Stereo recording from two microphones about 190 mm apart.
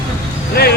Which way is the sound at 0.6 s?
55° left (ahead or behind).